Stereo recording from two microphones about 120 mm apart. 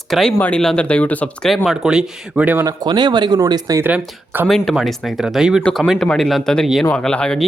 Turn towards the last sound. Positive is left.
turn(degrees=5)  # may be behind; listen again after turning